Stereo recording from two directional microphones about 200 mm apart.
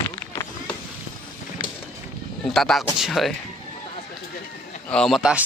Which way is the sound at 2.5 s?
Centre (ahead or behind).